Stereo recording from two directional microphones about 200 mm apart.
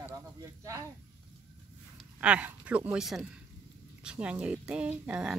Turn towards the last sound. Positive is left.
turn(degrees=-5)  # may be behind; listen again after turning